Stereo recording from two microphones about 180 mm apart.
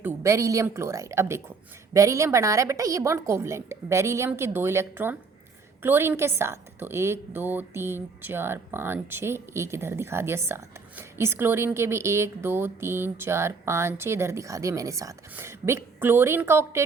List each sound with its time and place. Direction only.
0.0 s a woman's voice: 15° right (ahead or behind)